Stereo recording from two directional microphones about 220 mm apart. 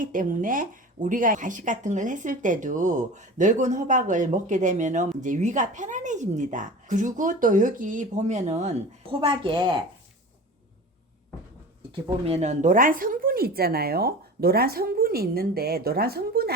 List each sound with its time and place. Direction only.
0.0 s a woman's voice: 35° right (ahead or behind); by 9.7 s 20° right (ahead or behind)
11.9 s speech: 25° right (ahead or behind); by 16.5 s 45° right (ahead or behind)